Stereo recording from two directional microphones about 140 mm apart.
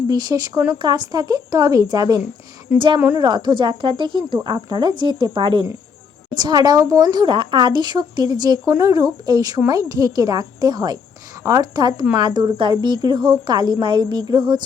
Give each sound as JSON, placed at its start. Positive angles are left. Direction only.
{"t": 0.1, "sound": "a woman's voice", "side_deg": -30}
{"t": 6.4, "sound": "a woman's voice", "side_deg": -25}